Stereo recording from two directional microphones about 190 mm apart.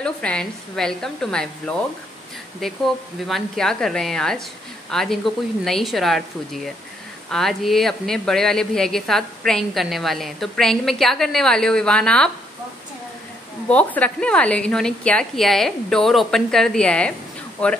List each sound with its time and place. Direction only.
0.0 s speech: 5° left (ahead or behind)
13.7 s speech: 5° left (ahead or behind)